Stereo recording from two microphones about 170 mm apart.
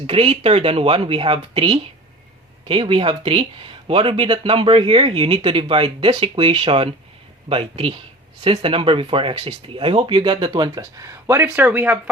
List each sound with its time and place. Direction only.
0.1 s speech: 35° right (ahead or behind); by 11.9 s 10° right (ahead or behind)